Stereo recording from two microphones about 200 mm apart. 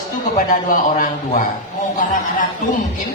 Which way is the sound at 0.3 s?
40° left (ahead or behind).